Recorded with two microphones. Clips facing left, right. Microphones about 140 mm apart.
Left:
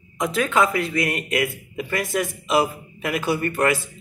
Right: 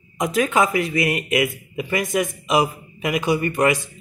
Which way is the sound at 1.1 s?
10° right (ahead or behind).